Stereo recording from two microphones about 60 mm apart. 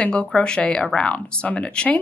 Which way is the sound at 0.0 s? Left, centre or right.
Centre.